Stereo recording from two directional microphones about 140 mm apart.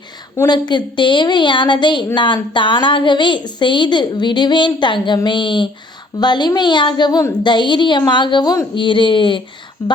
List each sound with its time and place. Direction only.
0.3 s a woman's voice: 30° left (ahead or behind)